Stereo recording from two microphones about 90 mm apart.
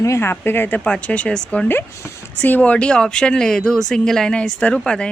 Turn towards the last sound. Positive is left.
turn(degrees=10)  # may be behind; listen again after turning